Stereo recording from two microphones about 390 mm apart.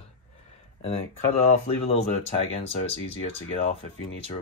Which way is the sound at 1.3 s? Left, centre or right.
Centre.